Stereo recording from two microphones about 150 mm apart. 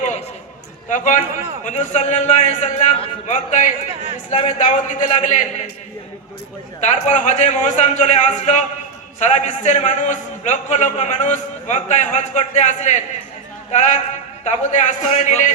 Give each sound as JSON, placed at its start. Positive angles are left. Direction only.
{"t": 0.9, "sound": "a man's voice", "side_deg": 55}
{"t": 6.8, "sound": "a man's voice", "side_deg": 50}